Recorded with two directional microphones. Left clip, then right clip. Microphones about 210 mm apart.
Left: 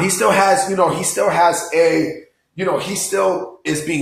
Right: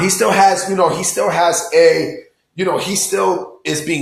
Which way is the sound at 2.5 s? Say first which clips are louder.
Right 2 dB; 25° right (ahead or behind).